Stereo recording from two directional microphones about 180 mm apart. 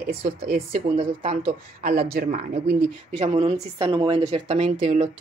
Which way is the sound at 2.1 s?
55° right (ahead or behind).